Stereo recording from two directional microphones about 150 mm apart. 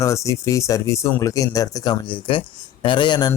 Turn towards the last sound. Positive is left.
turn(degrees=30)  # may be behind; listen again after turning